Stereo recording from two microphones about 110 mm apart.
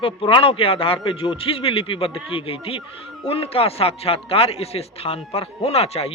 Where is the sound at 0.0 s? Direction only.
55° left (ahead or behind).